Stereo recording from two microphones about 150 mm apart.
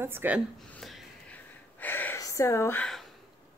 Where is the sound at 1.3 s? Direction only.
10° left (ahead or behind).